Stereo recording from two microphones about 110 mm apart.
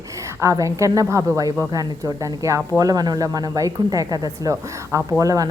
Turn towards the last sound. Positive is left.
turn(degrees=-30)  # may be behind; listen again after turning